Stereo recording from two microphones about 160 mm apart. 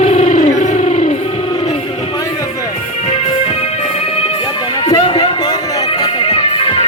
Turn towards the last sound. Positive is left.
turn(degrees=30)  # may be behind; listen again after turning